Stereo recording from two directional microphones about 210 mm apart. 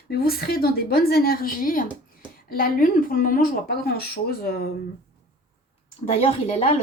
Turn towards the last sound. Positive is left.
turn(degrees=30)  # may be behind; listen again after turning